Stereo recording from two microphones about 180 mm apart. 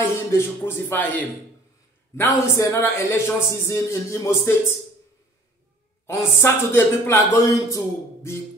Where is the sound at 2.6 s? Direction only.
15° left (ahead or behind).